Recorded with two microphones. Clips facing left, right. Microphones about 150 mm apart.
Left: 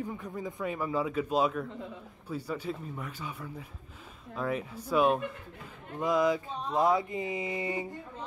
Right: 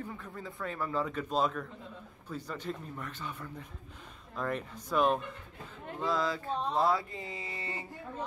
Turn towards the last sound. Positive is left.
turn(degrees=15)  # may be behind; listen again after turning